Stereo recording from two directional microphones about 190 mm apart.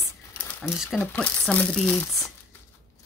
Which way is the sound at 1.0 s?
10° left (ahead or behind).